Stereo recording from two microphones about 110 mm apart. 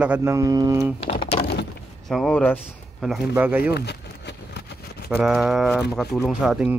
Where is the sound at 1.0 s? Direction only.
50° left (ahead or behind).